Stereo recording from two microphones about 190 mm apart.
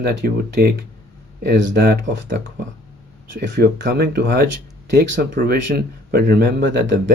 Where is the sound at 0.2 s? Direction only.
50° right (ahead or behind).